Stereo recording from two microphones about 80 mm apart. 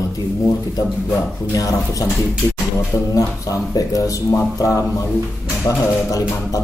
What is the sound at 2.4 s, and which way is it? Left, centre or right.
Music, left.